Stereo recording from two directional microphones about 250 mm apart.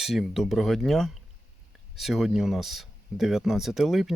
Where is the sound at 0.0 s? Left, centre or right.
Centre.